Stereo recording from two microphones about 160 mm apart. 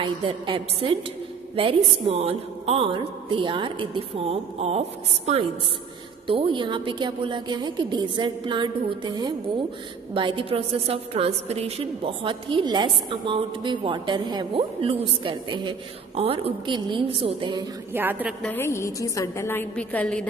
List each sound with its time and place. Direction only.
0.0 s a woman's voice: 35° right (ahead or behind)
17.9 s a woman's voice: 10° right (ahead or behind)
18.4 s a woman's voice: 15° left (ahead or behind)